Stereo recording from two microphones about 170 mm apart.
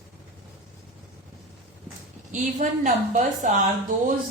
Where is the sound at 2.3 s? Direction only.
45° right (ahead or behind).